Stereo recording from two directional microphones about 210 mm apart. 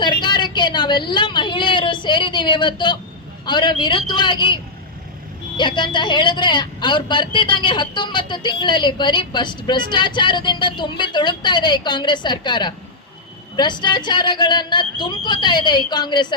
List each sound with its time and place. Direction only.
0.0 s a woman's voice: 20° left (ahead or behind)